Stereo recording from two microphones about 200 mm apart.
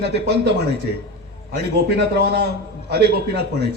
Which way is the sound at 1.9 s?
55° right (ahead or behind).